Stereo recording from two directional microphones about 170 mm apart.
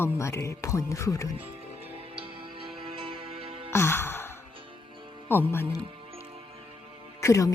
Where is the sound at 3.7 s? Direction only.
15° left (ahead or behind).